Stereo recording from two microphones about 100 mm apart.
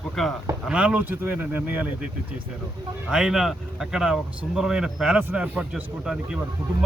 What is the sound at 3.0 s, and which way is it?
Speech, 5° right (ahead or behind).